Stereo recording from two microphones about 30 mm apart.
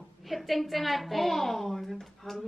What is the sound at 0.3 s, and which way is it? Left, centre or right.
A woman's voice, centre.